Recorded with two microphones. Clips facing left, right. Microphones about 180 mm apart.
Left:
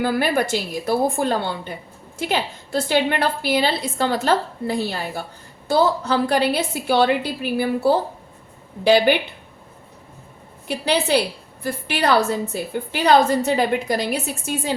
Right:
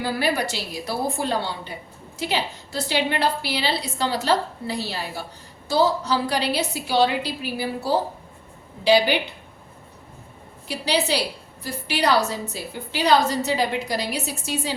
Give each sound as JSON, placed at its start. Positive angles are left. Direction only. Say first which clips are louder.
{"t": 0.0, "sound": "a woman's voice", "louder": "left 4 dB", "side_deg": 50}
{"t": 10.7, "sound": "a woman's voice", "louder": "left 4 dB", "side_deg": 55}